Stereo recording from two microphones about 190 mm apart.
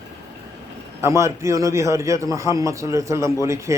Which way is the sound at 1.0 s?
15° right (ahead or behind).